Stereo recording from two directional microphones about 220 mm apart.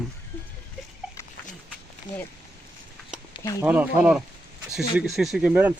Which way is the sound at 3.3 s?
15° left (ahead or behind).